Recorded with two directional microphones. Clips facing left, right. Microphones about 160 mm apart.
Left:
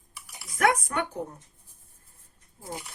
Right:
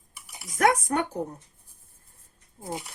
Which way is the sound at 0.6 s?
40° right (ahead or behind).